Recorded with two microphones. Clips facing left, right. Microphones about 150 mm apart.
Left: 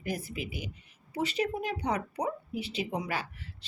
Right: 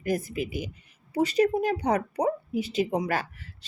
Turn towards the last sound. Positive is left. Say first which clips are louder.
# right 7 dB
turn(degrees=-45)  # may be behind; listen again after turning